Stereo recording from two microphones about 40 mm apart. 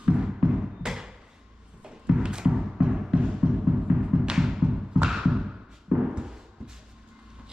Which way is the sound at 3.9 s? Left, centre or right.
Right.